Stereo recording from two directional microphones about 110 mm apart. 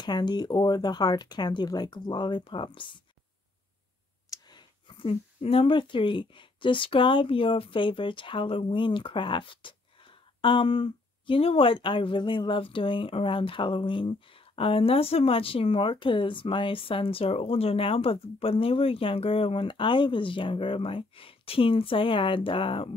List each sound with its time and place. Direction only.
0.0 s speech: 40° left (ahead or behind)
4.3 s a sound: 40° left (ahead or behind); by 5.8 s 60° left (ahead or behind)
5.8 s speech: 50° left (ahead or behind)